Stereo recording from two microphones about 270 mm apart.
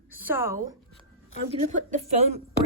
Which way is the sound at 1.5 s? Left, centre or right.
Right.